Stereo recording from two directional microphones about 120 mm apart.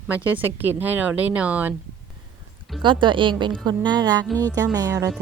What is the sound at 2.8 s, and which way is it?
A woman's voice, 45° right (ahead or behind).